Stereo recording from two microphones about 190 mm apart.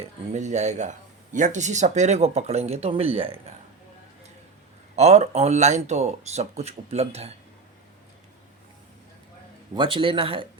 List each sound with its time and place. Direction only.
0.0 s speech: 40° right (ahead or behind)
4.9 s speech: 35° right (ahead or behind)
9.7 s speech: 25° right (ahead or behind)